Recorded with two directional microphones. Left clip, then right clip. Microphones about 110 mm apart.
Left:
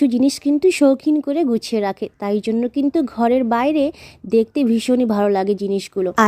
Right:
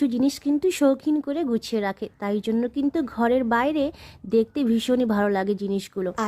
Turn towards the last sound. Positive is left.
turn(degrees=30)  # may be behind; listen again after turning